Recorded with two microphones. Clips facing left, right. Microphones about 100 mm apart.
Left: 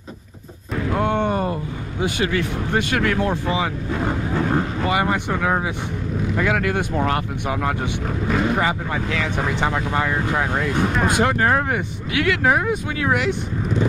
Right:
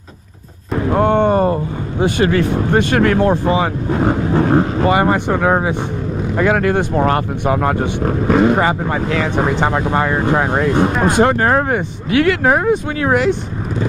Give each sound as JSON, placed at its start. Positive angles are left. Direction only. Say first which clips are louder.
{"t": 0.7, "sound": "speech", "louder": "right 7 dB", "side_deg": -40}